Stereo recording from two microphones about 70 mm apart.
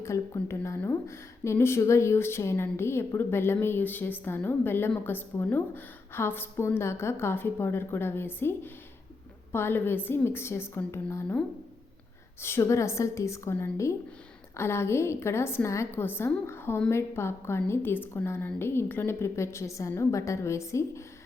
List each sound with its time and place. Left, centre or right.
0.0 s a woman's voice: left
12.4 s a woman's voice: left